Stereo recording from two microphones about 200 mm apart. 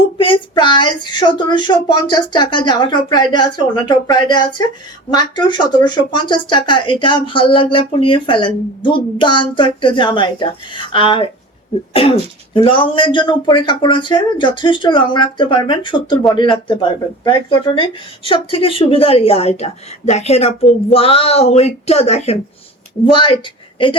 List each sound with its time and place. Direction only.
0.2 s a woman's voice: 25° left (ahead or behind)
12.5 s speech: 25° left (ahead or behind)